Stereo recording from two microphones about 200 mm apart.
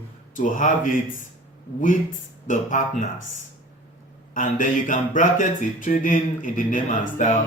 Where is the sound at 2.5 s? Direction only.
40° left (ahead or behind).